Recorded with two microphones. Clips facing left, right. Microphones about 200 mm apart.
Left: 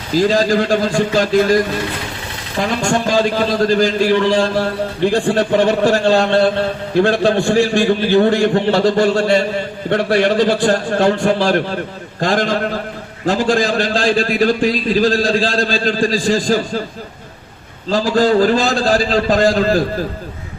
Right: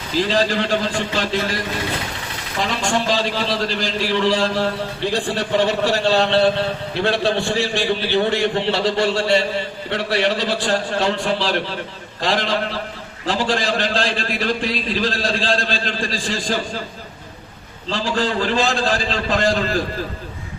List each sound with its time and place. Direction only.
0.1 s a man's voice: 45° left (ahead or behind)
17.9 s a man's voice: 40° left (ahead or behind)